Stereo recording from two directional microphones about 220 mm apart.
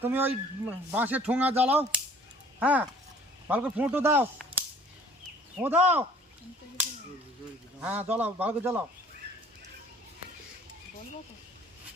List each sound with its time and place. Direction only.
0.0 s speech: 10° right (ahead or behind)
5.5 s speech: 10° right (ahead or behind)
7.8 s speech: 10° right (ahead or behind)